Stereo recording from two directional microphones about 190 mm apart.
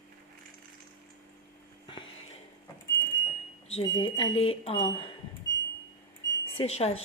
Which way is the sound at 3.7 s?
30° left (ahead or behind).